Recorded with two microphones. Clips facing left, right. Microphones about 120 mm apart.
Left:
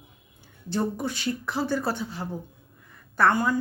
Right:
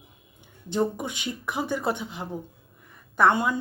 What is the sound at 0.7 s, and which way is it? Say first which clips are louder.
Speech: right 1 dB; 15° right (ahead or behind).